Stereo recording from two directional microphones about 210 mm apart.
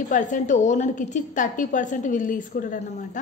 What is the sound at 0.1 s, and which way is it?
A woman's voice, 35° left (ahead or behind).